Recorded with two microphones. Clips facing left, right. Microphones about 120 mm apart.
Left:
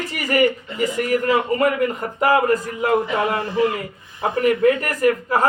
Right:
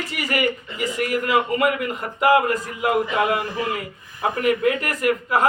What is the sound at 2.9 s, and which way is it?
Speech, 30° left (ahead or behind).